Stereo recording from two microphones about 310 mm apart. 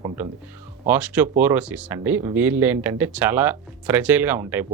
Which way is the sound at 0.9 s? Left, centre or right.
Centre.